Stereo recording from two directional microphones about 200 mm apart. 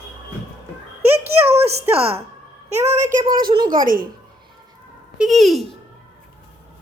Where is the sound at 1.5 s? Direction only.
30° right (ahead or behind).